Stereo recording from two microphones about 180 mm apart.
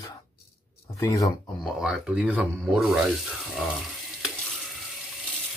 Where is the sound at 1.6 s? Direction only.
Centre (ahead or behind).